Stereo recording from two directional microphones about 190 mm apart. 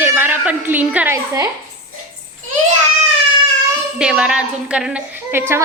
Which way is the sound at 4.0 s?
5° right (ahead or behind).